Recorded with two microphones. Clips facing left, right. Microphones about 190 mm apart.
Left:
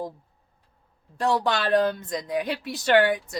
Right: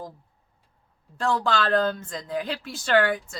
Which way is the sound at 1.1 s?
20° left (ahead or behind).